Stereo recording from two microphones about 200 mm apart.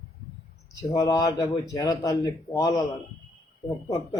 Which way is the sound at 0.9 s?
15° left (ahead or behind).